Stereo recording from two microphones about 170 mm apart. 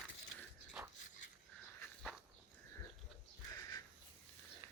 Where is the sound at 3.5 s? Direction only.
20° left (ahead or behind).